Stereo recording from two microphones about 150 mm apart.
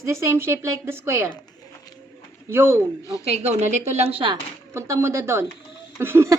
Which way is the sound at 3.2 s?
45° right (ahead or behind).